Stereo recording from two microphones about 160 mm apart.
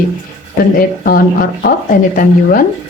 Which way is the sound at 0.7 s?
65° left (ahead or behind).